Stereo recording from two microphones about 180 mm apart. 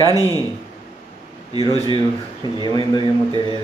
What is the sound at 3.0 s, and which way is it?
Speech, 25° right (ahead or behind).